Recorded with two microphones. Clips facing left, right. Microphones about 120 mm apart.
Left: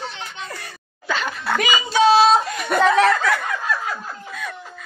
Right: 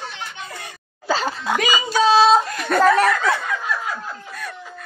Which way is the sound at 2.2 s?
5° left (ahead or behind).